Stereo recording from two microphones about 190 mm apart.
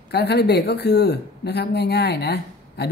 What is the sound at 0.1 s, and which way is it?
Speech, 60° left (ahead or behind).